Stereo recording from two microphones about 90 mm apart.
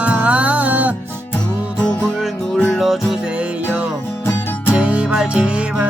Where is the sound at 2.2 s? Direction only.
5° left (ahead or behind).